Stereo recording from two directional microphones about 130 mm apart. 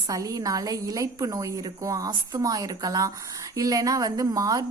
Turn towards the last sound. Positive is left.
turn(degrees=-25)  # may be behind; listen again after turning